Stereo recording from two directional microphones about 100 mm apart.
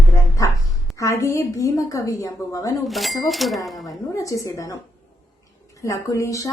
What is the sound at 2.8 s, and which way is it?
Speech, centre (ahead or behind).